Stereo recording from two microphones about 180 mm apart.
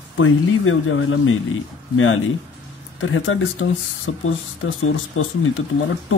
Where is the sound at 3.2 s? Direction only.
90° left.